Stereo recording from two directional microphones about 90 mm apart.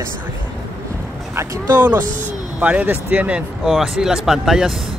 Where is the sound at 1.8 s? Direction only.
20° right (ahead or behind); by 4.7 s 5° right (ahead or behind).